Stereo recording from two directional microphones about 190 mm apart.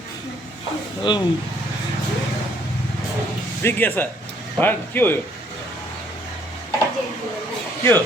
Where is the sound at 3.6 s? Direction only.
10° left (ahead or behind).